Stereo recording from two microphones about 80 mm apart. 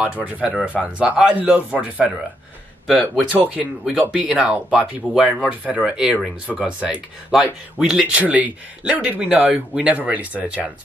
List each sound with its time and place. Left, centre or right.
0.0 s speech: centre
2.9 s speech: centre
4.0 s speech: centre